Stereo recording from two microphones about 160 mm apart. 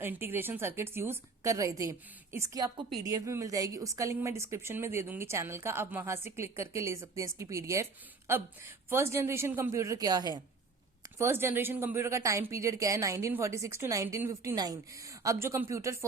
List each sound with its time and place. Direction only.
0.0 s speech: 15° right (ahead or behind)
11.2 s speech: 15° right (ahead or behind)